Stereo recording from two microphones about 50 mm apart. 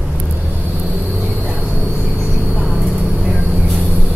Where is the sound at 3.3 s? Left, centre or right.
Right.